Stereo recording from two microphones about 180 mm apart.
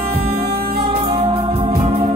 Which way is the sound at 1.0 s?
30° right (ahead or behind).